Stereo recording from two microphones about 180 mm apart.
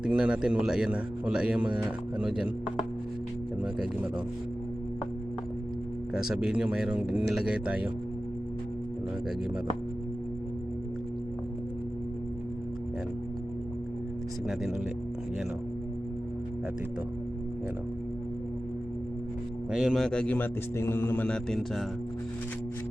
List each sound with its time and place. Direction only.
0.0 s a man's voice: 5° right (ahead or behind)
6.1 s a man's voice: 5° right (ahead or behind)
19.7 s a man's voice: centre (ahead or behind)